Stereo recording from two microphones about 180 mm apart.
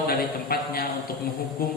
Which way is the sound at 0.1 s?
55° left (ahead or behind).